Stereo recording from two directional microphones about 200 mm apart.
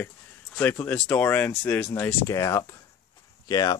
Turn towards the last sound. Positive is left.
turn(degrees=20)  # may be behind; listen again after turning